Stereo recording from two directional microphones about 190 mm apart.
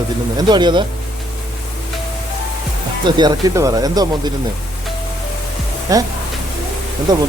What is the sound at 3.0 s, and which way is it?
Speech, 20° right (ahead or behind).